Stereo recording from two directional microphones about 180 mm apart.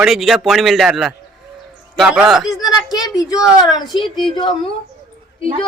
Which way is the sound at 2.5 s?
20° left (ahead or behind).